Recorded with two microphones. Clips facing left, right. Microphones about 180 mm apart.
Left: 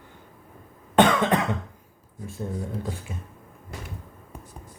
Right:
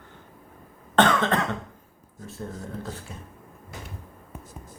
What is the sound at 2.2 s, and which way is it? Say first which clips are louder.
Speech: left 4 dB; 15° left (ahead or behind).